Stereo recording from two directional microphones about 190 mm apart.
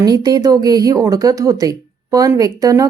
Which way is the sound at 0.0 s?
20° right (ahead or behind).